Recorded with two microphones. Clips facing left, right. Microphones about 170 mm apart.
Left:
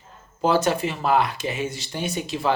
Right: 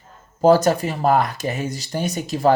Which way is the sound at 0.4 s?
40° right (ahead or behind).